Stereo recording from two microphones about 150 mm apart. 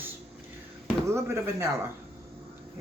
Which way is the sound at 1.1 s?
15° right (ahead or behind).